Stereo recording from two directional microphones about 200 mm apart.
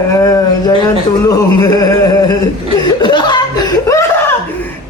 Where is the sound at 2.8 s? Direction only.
25° left (ahead or behind).